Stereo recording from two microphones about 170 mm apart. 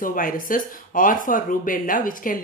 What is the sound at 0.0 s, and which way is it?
Speech, 55° left (ahead or behind).